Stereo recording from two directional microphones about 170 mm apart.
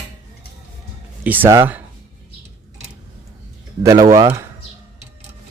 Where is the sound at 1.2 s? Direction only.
10° right (ahead or behind).